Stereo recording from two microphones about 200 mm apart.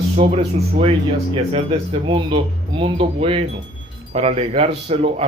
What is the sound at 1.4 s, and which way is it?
Speech, 30° right (ahead or behind).